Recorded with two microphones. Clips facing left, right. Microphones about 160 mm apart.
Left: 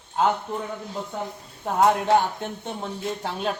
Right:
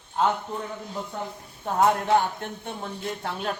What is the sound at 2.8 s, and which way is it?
Speech, 15° left (ahead or behind).